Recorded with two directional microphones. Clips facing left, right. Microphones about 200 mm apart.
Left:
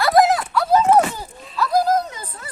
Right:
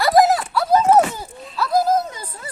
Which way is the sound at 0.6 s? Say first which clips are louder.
Right 1 dB; 10° right (ahead or behind).